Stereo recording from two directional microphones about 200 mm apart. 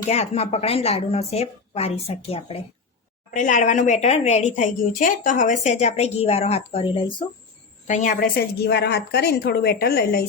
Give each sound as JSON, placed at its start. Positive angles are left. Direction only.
{"t": 0.1, "sound": "a woman's voice", "side_deg": 30}
{"t": 3.3, "sound": "a woman's voice", "side_deg": 40}
{"t": 7.9, "sound": "a woman's voice", "side_deg": 40}